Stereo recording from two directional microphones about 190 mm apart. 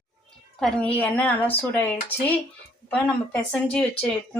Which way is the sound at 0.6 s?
5° left (ahead or behind).